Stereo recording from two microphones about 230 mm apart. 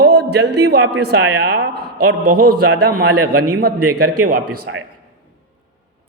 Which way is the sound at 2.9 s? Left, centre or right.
Right.